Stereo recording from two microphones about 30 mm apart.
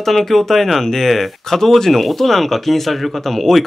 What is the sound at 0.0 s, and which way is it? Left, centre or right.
Speech, centre.